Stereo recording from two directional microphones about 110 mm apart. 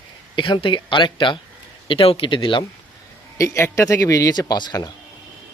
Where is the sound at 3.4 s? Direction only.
25° left (ahead or behind).